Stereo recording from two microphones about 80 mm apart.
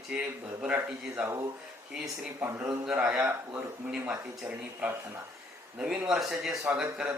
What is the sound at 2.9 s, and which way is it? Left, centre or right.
A man's voice, right.